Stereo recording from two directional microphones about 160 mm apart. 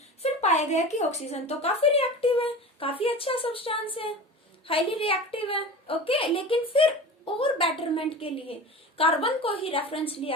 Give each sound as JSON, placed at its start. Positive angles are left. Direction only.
{"t": 0.2, "sound": "a woman's voice", "side_deg": 45}